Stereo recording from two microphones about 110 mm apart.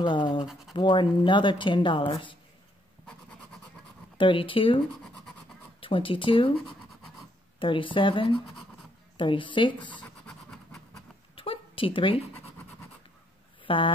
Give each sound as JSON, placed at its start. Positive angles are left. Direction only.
{"t": 0.0, "sound": "a woman's voice", "side_deg": 45}
{"t": 4.2, "sound": "a woman's voice", "side_deg": 50}
{"t": 11.3, "sound": "a sound", "side_deg": 55}
{"t": 13.7, "sound": "a woman's voice", "side_deg": 50}